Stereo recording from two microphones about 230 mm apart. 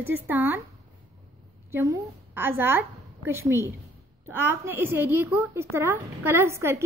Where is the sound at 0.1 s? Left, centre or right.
Centre.